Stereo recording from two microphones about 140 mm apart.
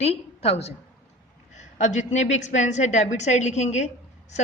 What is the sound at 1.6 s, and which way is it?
A woman's voice, 55° left (ahead or behind).